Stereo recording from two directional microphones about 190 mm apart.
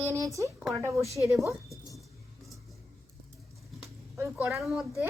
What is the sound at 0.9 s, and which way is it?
Speech, 15° right (ahead or behind).